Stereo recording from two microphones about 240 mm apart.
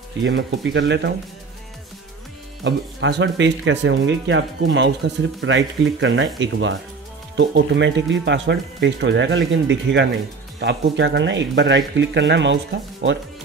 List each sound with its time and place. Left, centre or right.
0.2 s speech: right
2.6 s speech: right